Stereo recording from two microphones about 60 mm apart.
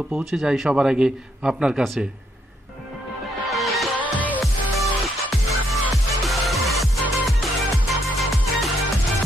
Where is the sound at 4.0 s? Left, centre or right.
Left.